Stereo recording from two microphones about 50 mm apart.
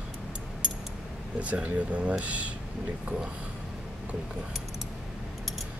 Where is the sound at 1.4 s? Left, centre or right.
Right.